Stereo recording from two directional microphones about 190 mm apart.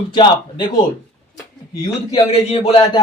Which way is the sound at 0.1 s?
25° left (ahead or behind).